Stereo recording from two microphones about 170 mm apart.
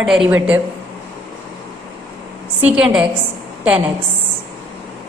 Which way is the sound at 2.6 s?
5° right (ahead or behind).